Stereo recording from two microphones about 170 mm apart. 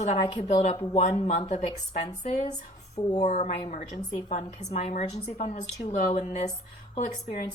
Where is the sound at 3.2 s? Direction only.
45° left (ahead or behind).